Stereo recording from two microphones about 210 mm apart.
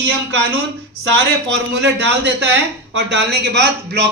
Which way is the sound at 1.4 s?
60° right (ahead or behind).